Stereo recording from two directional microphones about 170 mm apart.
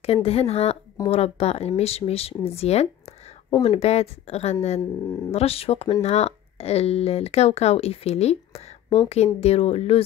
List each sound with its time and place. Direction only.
0.0 s speech: 35° left (ahead or behind)